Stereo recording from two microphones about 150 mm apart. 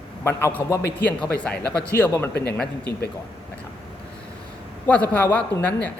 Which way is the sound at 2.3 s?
90° left.